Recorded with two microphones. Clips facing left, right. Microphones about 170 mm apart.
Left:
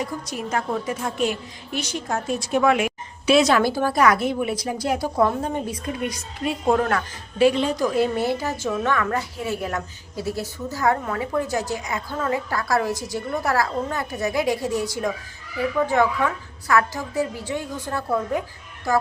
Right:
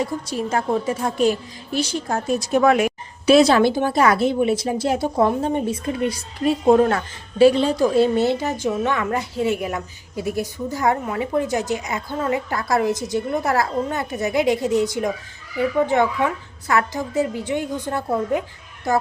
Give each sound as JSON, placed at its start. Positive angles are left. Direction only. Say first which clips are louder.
{"t": 0.0, "sound": "a woman's voice", "louder": "right 4 dB", "side_deg": -30}
{"t": 9.6, "sound": "a woman's voice", "louder": "right 1 dB", "side_deg": -15}